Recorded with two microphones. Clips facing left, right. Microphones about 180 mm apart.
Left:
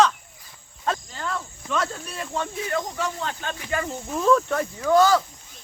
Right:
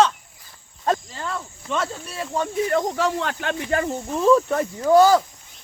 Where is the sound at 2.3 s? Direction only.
40° right (ahead or behind).